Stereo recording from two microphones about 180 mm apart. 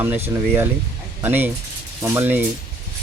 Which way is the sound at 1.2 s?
10° right (ahead or behind).